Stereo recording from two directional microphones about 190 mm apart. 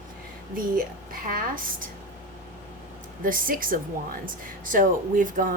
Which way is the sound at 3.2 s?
45° right (ahead or behind).